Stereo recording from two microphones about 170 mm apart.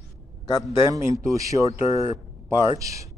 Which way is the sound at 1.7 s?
35° left (ahead or behind).